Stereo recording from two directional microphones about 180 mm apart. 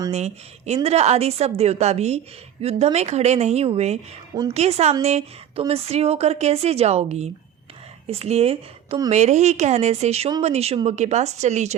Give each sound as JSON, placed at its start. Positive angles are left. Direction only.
{"t": 0.1, "sound": "a woman's voice", "side_deg": -40}